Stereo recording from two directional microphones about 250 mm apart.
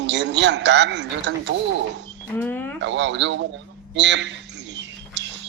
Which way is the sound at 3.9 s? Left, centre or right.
Right.